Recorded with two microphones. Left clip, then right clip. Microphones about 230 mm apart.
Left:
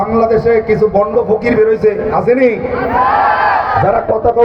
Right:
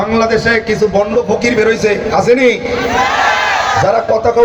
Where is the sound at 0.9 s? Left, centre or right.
Right.